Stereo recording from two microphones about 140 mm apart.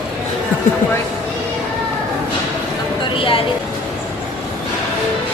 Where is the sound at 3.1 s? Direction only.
40° left (ahead or behind).